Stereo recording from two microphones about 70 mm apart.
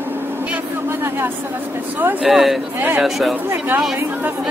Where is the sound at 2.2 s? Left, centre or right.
Centre.